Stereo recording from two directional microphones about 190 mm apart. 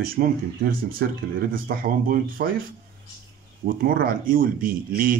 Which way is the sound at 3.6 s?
50° right (ahead or behind).